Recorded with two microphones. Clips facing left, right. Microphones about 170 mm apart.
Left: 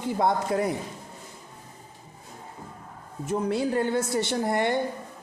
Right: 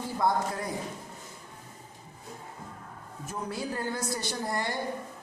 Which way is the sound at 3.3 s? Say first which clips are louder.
Left 9 dB; 25° left (ahead or behind).